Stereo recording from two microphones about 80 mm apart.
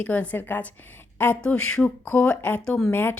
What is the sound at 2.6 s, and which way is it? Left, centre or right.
Speech, centre.